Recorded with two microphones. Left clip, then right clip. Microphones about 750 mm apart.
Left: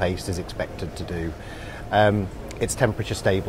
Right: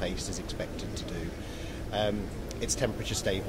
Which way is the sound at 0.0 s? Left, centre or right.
Left.